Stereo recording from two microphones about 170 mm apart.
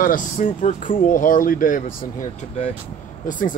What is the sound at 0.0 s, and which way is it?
Speech, 55° left (ahead or behind).